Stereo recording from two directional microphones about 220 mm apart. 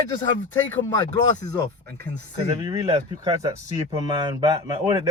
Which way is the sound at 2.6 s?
15° right (ahead or behind).